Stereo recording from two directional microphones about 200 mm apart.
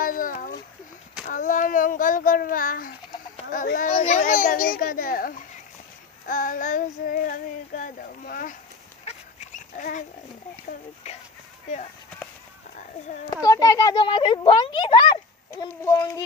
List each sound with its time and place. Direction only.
0.0 s a sound: 45° left (ahead or behind)
1.3 s child singing: 40° left (ahead or behind)
3.3 s a child's voice: 45° left (ahead or behind)
6.2 s child singing: 40° left (ahead or behind)
9.0 s dog: 35° left (ahead or behind)
10.7 s child singing: 35° left (ahead or behind)
13.4 s a child's voice: 15° left (ahead or behind)
15.5 s speech: 15° left (ahead or behind)